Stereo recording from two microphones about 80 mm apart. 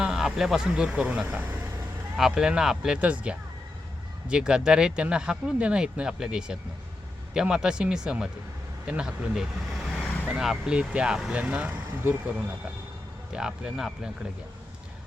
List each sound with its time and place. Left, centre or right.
0.0 s speech: centre; by 1.7 s right
2.1 s speech: centre; by 12.4 s right
13.3 s speech: centre